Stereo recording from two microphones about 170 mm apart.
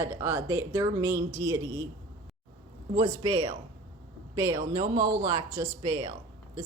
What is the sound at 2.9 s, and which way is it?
Speech, 25° right (ahead or behind).